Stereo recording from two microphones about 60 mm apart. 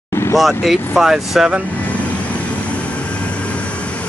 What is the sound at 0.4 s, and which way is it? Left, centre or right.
Speech, centre.